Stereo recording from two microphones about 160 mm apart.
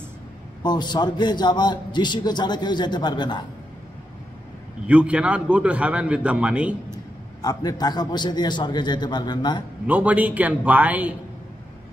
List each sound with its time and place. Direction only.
0.7 s a man's voice: 25° left (ahead or behind)
4.8 s a man's voice: 5° right (ahead or behind)
7.4 s a man's voice: 25° left (ahead or behind)
9.8 s a man's voice: 10° right (ahead or behind)